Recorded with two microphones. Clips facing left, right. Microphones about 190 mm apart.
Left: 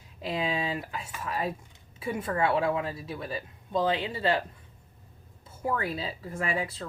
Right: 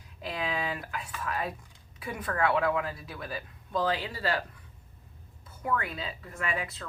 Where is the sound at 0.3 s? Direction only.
25° left (ahead or behind).